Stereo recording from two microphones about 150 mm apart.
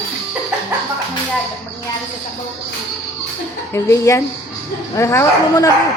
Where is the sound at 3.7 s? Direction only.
20° left (ahead or behind).